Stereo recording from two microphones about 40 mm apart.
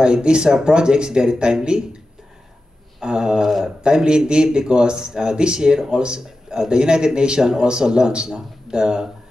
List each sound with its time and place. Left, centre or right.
0.0 s speech: right
3.0 s speech: centre
3.4 s a man's voice: centre
3.8 s speech: right